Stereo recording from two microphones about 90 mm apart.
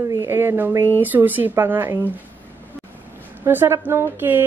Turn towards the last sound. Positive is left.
turn(degrees=-25)  # may be behind; listen again after turning